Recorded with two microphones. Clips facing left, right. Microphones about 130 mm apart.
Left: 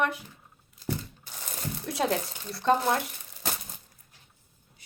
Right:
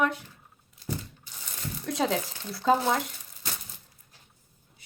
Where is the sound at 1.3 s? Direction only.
50° left (ahead or behind).